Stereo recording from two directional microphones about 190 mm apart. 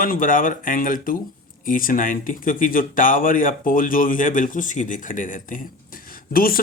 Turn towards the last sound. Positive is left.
turn(degrees=50)  # may be behind; listen again after turning